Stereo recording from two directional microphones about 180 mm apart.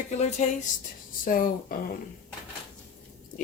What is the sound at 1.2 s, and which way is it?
Speech, 50° left (ahead or behind).